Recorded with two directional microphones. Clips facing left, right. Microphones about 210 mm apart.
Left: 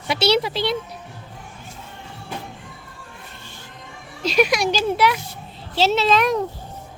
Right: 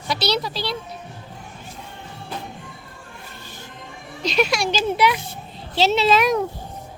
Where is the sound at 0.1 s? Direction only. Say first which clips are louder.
Left 4 dB; 25° left (ahead or behind).